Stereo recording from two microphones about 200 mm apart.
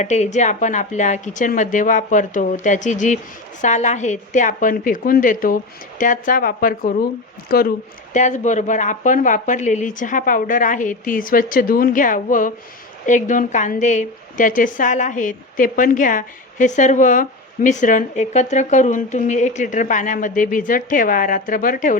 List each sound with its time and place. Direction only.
0.0 s a woman's voice: 35° left (ahead or behind)
8.1 s a woman's voice: 35° left (ahead or behind)